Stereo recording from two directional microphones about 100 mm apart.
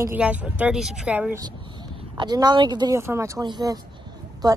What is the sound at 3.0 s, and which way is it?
Speech, 30° right (ahead or behind).